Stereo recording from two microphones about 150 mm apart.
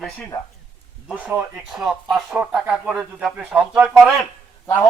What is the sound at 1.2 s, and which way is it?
Speech, 10° right (ahead or behind).